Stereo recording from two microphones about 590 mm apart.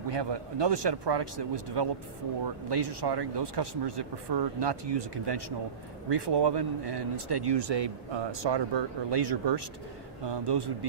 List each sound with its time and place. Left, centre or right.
0.1 s speech: right